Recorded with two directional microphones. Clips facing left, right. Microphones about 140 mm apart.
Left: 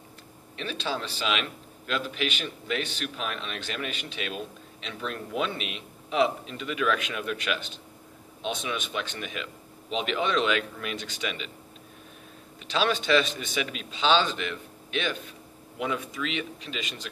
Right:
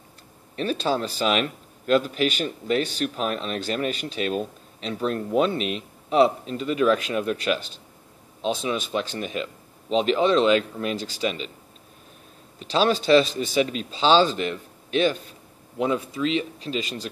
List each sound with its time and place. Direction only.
0.6 s a man's voice: 40° right (ahead or behind)
12.5 s a man's voice: 35° right (ahead or behind)